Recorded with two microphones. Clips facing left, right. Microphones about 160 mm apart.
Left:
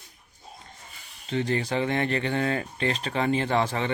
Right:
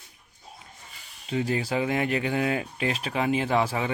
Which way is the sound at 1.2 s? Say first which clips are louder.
Even; 5° right (ahead or behind).